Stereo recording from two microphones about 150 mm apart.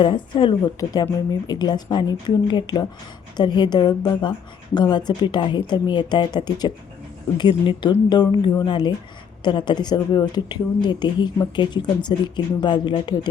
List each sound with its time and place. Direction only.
0.0 s a woman's voice: 35° left (ahead or behind)